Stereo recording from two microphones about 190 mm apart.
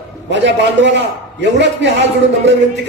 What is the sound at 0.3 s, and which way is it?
A man's voice, 65° right (ahead or behind).